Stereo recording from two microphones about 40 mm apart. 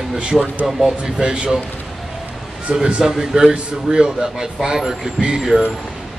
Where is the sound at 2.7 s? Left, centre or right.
Centre.